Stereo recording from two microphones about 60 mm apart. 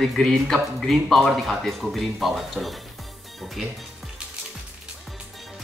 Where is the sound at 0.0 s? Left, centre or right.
Centre.